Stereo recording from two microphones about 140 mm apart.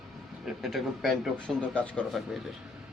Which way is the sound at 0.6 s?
Centre (ahead or behind).